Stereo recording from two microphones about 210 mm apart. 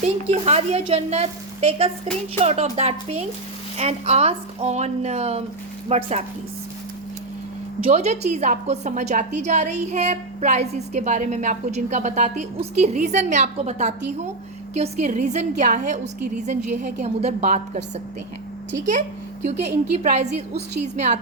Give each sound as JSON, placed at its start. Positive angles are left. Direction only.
{"t": 0.0, "sound": "a woman's voice", "side_deg": -30}
{"t": 7.9, "sound": "a woman's voice", "side_deg": -30}
{"t": 18.9, "sound": "a woman's voice", "side_deg": -35}